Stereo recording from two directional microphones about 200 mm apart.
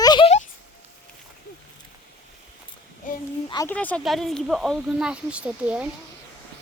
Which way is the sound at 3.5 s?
15° left (ahead or behind).